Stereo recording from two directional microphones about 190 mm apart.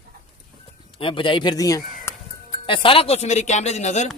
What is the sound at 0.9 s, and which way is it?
Speech, 25° left (ahead or behind).